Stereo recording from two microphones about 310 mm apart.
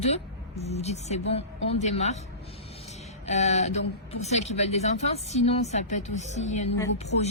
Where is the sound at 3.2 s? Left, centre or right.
Left.